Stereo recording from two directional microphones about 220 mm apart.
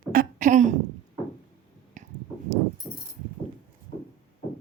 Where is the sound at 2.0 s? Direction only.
35° right (ahead or behind).